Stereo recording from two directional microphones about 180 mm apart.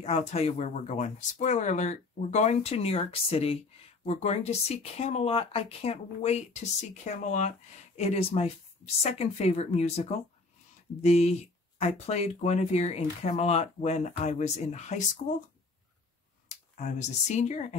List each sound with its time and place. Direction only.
0.0 s speech: 35° left (ahead or behind)
16.4 s speech: 40° left (ahead or behind)